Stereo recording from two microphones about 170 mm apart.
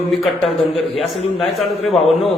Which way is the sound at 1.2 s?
35° left (ahead or behind).